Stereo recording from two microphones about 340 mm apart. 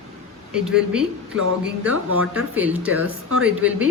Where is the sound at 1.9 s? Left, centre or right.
Right.